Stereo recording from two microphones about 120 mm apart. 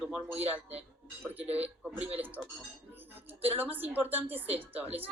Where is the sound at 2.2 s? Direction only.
15° right (ahead or behind).